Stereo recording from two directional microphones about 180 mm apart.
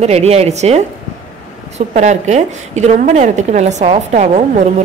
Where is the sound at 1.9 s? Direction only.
40° right (ahead or behind).